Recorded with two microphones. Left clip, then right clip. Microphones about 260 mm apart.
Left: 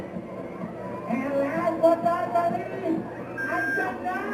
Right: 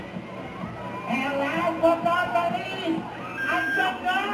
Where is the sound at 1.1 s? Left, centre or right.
Centre.